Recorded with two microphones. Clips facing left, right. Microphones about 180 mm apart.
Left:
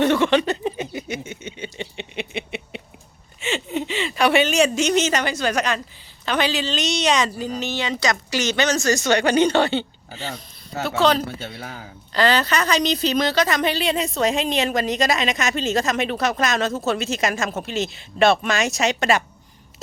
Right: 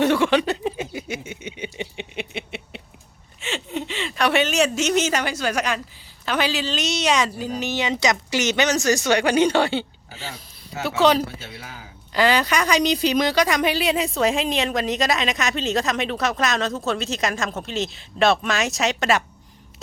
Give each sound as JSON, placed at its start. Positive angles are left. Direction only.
{"t": 0.0, "sound": "a sound", "side_deg": -5}
{"t": 3.4, "sound": "a woman's voice", "side_deg": 0}
{"t": 11.4, "sound": "speech", "side_deg": 40}
{"t": 12.1, "sound": "a woman's voice", "side_deg": -10}